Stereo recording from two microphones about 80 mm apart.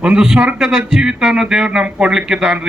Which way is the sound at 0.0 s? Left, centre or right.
Centre.